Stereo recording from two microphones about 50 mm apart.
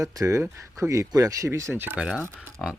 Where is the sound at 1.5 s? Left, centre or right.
Right.